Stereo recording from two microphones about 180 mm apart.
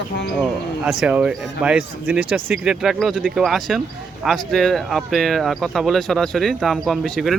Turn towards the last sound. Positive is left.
turn(degrees=0)  # may be behind; listen again after turning